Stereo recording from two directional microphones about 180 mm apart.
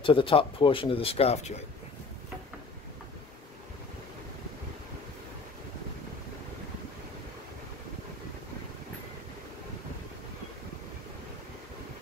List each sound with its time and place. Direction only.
0.0 s a man's voice: 30° left (ahead or behind)